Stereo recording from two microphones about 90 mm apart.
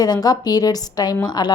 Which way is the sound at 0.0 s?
45° left (ahead or behind).